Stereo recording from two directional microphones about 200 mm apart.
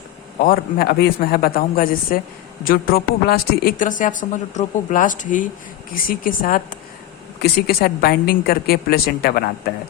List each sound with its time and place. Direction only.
0.4 s a woman's voice: 50° left (ahead or behind)